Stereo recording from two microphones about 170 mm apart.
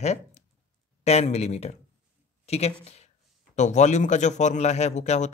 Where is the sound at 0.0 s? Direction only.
40° left (ahead or behind).